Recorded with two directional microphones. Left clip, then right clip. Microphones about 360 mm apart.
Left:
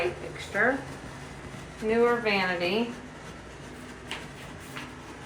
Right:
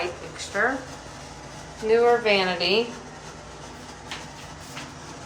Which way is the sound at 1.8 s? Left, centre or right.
Centre.